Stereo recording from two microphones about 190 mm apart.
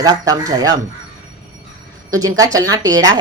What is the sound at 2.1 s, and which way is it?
A woman's voice, 20° right (ahead or behind).